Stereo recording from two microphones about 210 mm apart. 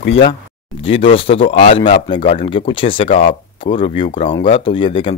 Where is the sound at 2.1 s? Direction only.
25° left (ahead or behind).